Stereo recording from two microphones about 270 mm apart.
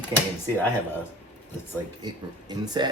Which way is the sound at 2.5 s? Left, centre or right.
Centre.